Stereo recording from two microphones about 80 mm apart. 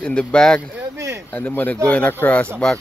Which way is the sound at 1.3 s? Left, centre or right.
Left.